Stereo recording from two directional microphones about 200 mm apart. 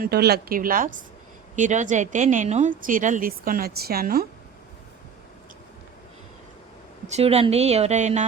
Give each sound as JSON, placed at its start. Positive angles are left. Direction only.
{"t": 0.0, "sound": "a woman's voice", "side_deg": -55}
{"t": 7.1, "sound": "speech", "side_deg": -30}